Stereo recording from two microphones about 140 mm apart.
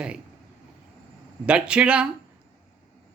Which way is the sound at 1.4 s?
10° right (ahead or behind).